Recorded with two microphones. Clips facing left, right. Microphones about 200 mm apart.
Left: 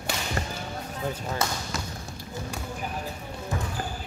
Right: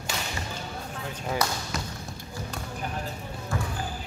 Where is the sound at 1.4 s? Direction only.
25° left (ahead or behind).